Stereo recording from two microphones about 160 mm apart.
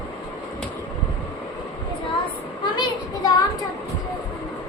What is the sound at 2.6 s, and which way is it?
Children playing, 30° left (ahead or behind).